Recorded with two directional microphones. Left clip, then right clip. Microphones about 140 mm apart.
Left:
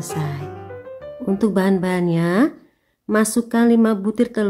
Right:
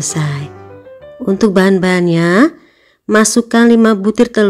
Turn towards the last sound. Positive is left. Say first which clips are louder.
# right 9 dB
turn(degrees=-25)  # may be behind; listen again after turning